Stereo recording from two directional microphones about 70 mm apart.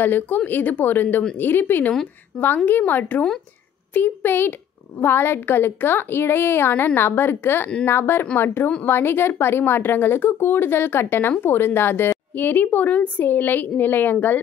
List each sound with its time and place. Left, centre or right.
0.0 s a woman's voice: left